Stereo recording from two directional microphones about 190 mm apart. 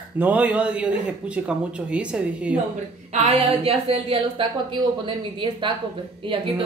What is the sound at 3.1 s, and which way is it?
A woman's voice, 35° right (ahead or behind).